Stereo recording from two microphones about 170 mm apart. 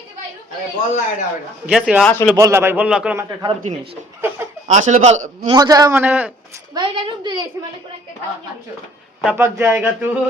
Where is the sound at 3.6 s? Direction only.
35° right (ahead or behind).